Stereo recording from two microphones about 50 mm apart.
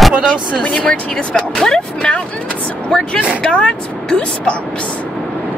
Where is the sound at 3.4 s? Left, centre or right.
Left.